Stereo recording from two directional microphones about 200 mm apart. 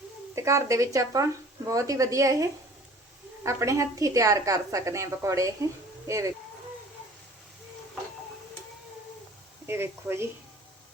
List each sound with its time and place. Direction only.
0.3 s a woman's voice: 15° right (ahead or behind)
9.6 s speech: 10° right (ahead or behind)